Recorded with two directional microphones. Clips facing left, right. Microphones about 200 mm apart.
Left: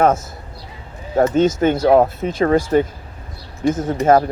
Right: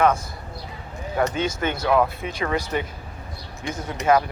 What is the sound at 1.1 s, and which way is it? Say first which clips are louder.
Speech: left 9 dB; 45° left (ahead or behind).